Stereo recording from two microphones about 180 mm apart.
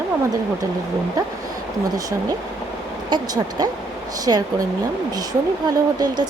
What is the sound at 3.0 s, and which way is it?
Speech, 25° right (ahead or behind).